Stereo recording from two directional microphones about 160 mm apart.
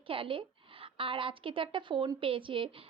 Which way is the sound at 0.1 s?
35° right (ahead or behind).